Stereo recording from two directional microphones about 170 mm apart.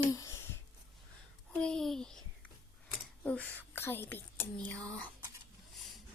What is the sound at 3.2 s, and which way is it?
Speech, 10° left (ahead or behind).